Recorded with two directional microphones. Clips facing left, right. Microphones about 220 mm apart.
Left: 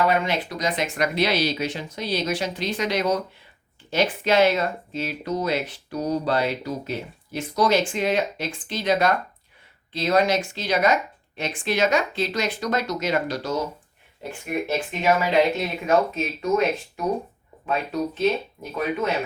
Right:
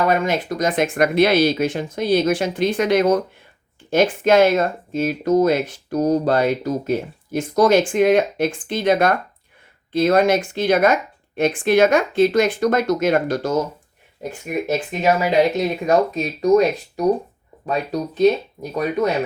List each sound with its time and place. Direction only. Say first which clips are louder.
0.1 s speech: right 4 dB; 45° right (ahead or behind)